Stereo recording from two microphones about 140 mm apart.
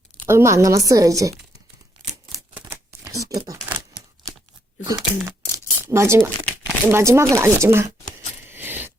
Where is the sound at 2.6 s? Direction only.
20° right (ahead or behind).